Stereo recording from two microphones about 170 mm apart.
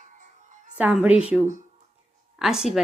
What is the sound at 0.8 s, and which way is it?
Speech, 10° right (ahead or behind).